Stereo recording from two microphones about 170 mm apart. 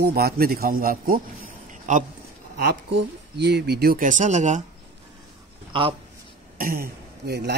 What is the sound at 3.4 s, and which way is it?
Speech, 70° right (ahead or behind).